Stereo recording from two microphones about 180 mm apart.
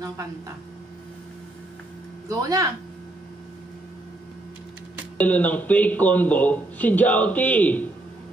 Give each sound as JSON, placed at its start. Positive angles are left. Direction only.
{"t": 2.2, "sound": "speech", "side_deg": -20}
{"t": 5.1, "sound": "speech", "side_deg": 10}